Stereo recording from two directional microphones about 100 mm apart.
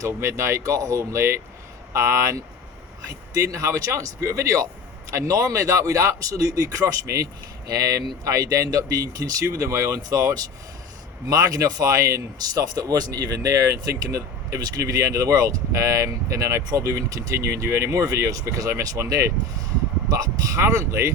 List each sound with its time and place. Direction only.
0.0 s speech: 30° right (ahead or behind)